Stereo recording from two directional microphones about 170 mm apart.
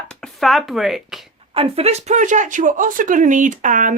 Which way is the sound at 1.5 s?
35° right (ahead or behind).